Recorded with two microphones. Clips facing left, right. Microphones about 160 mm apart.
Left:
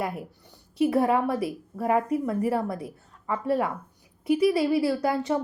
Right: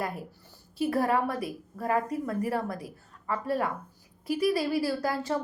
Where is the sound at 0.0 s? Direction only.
20° left (ahead or behind).